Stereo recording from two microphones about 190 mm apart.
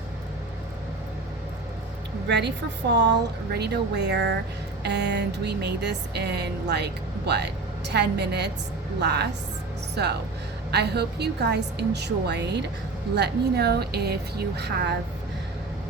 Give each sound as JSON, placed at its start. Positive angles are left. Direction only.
{"t": 2.2, "sound": "a woman's voice", "side_deg": -65}
{"t": 2.9, "sound": "music", "side_deg": -65}
{"t": 9.9, "sound": "speech", "side_deg": -60}
{"t": 10.7, "sound": "music", "side_deg": -60}